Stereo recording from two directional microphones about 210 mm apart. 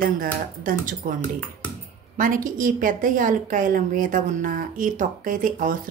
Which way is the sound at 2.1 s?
40° right (ahead or behind).